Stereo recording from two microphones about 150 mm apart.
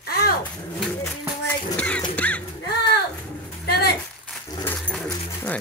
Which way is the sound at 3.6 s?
90° left.